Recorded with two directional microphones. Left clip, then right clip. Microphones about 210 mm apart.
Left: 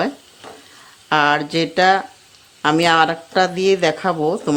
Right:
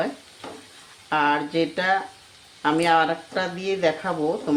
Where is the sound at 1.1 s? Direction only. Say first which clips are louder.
Left 5 dB; 55° left (ahead or behind).